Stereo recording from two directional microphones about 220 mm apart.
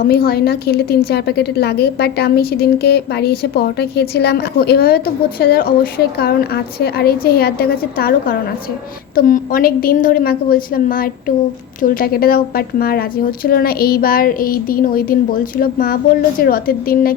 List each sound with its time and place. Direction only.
0.1 s a woman's voice: 45° left (ahead or behind)